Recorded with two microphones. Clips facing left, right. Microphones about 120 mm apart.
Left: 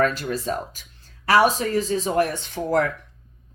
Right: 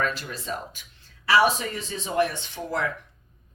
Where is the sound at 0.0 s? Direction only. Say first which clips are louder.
Left 7 dB; 45° left (ahead or behind).